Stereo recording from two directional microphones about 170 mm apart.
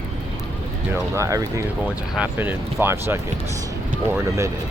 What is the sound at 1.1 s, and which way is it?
Speech, 20° right (ahead or behind).